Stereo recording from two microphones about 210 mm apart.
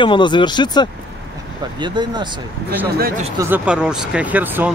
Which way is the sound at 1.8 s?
20° right (ahead or behind).